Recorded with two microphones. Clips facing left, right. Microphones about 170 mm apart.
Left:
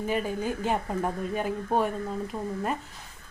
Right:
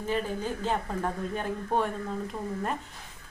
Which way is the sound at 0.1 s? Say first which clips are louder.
Even; 10° left (ahead or behind).